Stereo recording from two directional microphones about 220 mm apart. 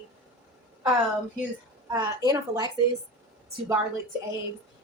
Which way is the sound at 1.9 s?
15° right (ahead or behind).